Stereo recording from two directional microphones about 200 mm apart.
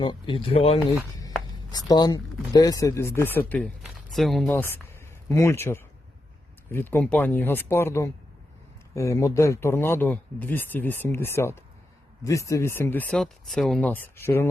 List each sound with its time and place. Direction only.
0.0 s speech: 25° left (ahead or behind); by 4.5 s centre (ahead or behind)
4.5 s speech: 10° left (ahead or behind)